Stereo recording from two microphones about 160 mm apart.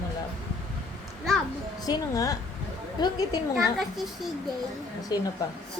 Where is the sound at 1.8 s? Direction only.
20° left (ahead or behind).